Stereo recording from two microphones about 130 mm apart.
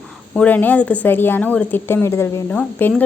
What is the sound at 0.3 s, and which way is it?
A woman's voice, 10° left (ahead or behind).